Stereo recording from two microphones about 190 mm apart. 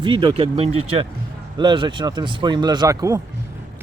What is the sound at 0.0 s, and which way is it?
Speech, 25° right (ahead or behind).